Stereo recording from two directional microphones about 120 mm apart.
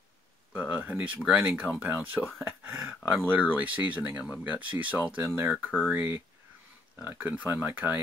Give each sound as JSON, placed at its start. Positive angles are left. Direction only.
{"t": 0.5, "sound": "speech", "side_deg": -10}